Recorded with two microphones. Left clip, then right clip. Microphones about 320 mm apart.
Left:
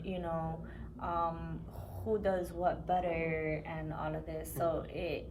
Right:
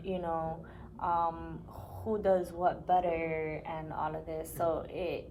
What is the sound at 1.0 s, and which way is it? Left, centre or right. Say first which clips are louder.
Speech: right 4 dB; centre.